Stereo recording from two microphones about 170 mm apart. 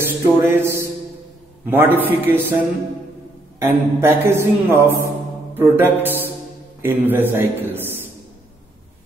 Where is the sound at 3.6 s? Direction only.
15° right (ahead or behind).